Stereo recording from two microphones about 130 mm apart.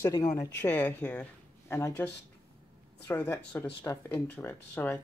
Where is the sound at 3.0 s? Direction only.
15° left (ahead or behind).